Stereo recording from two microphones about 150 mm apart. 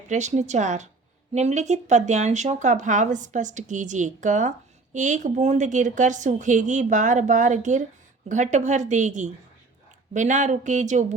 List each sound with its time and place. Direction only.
0.1 s a woman's voice: 50° right (ahead or behind)